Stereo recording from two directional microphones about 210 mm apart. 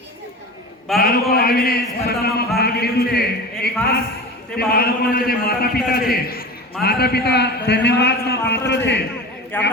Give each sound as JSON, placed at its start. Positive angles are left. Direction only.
{"t": 0.9, "sound": "a man's voice", "side_deg": 45}
{"t": 9.5, "sound": "a man's voice", "side_deg": 10}